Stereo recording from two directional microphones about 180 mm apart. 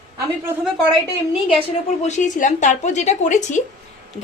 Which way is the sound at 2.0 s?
40° left (ahead or behind).